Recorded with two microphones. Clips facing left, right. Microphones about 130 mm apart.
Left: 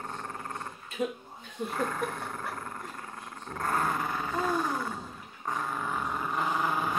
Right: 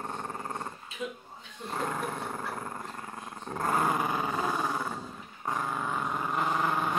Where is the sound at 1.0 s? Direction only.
45° left (ahead or behind).